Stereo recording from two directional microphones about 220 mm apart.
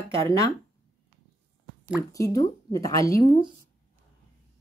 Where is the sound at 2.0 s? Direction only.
15° left (ahead or behind).